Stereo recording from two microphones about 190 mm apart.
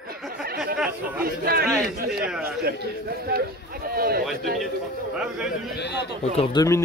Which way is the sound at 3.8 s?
50° right (ahead or behind).